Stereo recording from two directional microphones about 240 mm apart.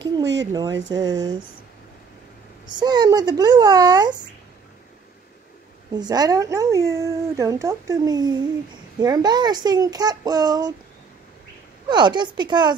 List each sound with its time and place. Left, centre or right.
0.0 s speech: right
0.5 s speech: centre
2.6 s speech: centre
5.9 s speech: centre
11.9 s speech: centre